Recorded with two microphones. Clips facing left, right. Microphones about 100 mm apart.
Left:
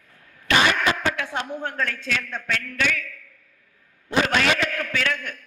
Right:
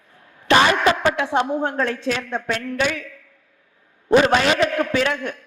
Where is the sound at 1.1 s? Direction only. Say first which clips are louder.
Right 8 dB; 20° right (ahead or behind).